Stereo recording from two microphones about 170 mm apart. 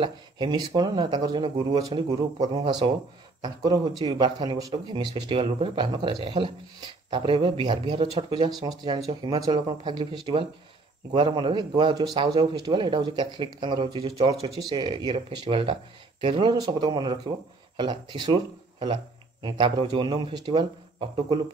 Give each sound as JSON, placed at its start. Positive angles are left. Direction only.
{"t": 0.0, "sound": "a man's voice", "side_deg": -25}
{"t": 11.1, "sound": "a man's voice", "side_deg": -30}
{"t": 14.6, "sound": "a man's voice", "side_deg": -25}